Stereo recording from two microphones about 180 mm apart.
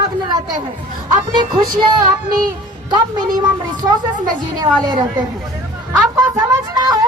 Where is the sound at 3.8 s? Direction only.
15° right (ahead or behind).